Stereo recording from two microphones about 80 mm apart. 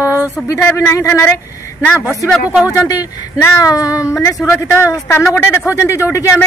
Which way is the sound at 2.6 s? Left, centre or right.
Left.